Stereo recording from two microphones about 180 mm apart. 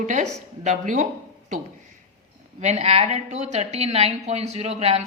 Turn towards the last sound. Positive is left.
turn(degrees=-35)  # may be behind; listen again after turning